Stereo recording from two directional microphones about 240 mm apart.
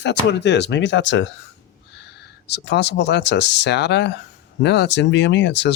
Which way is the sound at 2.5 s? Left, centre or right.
Left.